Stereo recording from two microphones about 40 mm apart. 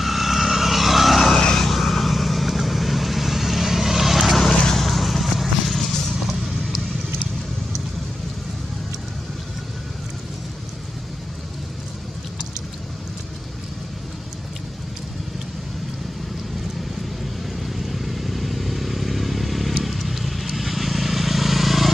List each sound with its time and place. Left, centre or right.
0.0 s vehicle: centre
1.2 s vehicle: centre
1.7 s vehicle: centre
4.4 s vehicle: centre
4.7 s vehicle: centre
17.5 s vehicle: centre